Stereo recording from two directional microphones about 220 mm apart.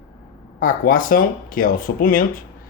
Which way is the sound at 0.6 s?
40° left (ahead or behind).